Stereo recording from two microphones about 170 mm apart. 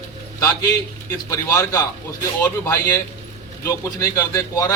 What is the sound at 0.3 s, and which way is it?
A man's voice, 20° left (ahead or behind).